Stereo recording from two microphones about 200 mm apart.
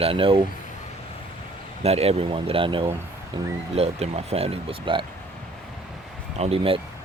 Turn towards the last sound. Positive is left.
turn(degrees=-30)  # may be behind; listen again after turning